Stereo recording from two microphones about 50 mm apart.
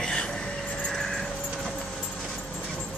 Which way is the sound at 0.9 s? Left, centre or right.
Centre.